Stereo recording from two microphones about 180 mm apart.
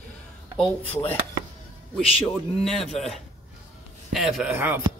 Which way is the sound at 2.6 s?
Centre (ahead or behind).